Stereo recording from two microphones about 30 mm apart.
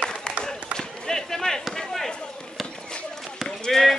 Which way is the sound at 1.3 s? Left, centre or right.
Centre.